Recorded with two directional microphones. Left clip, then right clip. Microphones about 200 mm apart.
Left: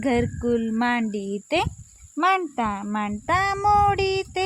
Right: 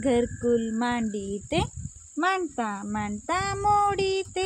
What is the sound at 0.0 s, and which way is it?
Speech, 35° left (ahead or behind).